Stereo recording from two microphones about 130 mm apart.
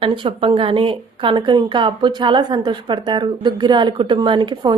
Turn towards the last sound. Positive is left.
turn(degrees=-35)  # may be behind; listen again after turning